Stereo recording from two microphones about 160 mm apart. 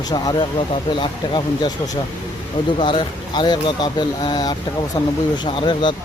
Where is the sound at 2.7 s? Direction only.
30° left (ahead or behind).